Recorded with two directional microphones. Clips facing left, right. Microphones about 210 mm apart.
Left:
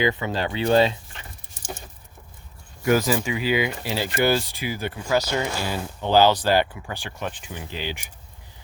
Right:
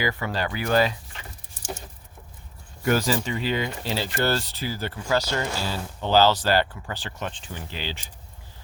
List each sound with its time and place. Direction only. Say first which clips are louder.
0.0 s speech: left 4 dB; 20° left (ahead or behind)
3.1 s speech: left 2 dB; 10° left (ahead or behind)